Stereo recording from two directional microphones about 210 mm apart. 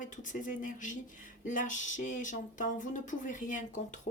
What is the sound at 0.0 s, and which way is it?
Speech, 35° left (ahead or behind).